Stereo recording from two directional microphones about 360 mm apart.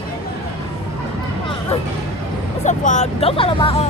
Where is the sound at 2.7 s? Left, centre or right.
Centre.